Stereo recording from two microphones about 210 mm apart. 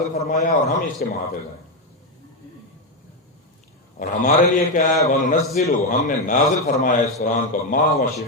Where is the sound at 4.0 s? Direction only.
40° left (ahead or behind).